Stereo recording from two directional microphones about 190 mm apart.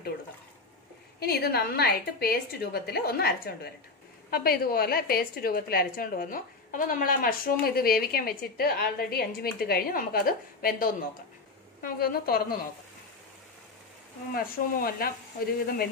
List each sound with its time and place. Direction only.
1.2 s a woman's voice: 55° left (ahead or behind)
14.3 s a woman's voice: 50° left (ahead or behind)